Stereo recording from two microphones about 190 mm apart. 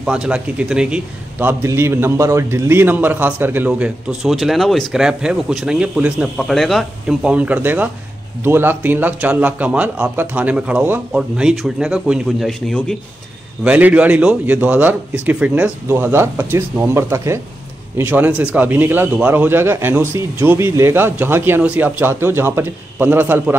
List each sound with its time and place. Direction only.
0.0 s a man's voice: 5° right (ahead or behind)
13.7 s a man's voice: 5° right (ahead or behind)